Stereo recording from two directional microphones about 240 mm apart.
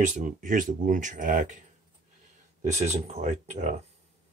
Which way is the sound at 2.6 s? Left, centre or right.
Right.